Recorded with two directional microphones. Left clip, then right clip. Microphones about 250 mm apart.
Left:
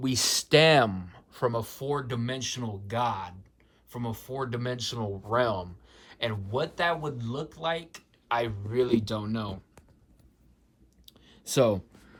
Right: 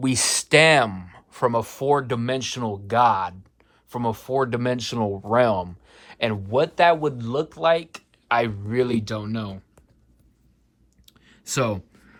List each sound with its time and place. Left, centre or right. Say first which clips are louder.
0.1 s speech: right 2 dB; left
0.4 s speech: right 5 dB; centre
11.1 s a sound: right 1 dB; centre